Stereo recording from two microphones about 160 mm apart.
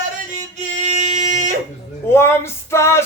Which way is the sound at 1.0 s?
50° right (ahead or behind).